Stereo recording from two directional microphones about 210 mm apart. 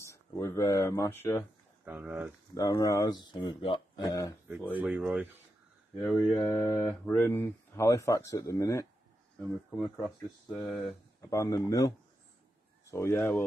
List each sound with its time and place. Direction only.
0.1 s speech: 15° left (ahead or behind)
1.9 s speech: 10° right (ahead or behind)
2.5 s speech: 15° left (ahead or behind)
4.7 s speech: 5° right (ahead or behind)
5.9 s speech: 5° left (ahead or behind)
9.7 s speech: 5° left (ahead or behind)
11.2 s speech: 15° left (ahead or behind)
12.9 s speech: 10° left (ahead or behind)